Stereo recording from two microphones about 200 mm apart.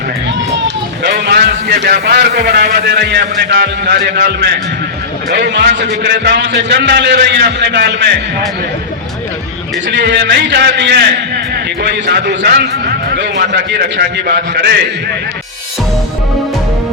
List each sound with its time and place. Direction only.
1.0 s a man's voice: 55° right (ahead or behind)
9.9 s a man's voice: 60° right (ahead or behind)